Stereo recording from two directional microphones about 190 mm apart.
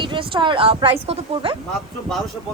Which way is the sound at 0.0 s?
25° right (ahead or behind).